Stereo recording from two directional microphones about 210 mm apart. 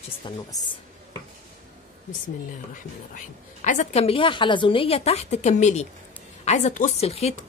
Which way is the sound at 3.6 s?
35° left (ahead or behind).